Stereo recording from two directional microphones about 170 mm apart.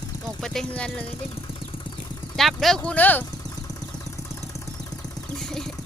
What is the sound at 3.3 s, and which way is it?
Vehicle, 20° left (ahead or behind).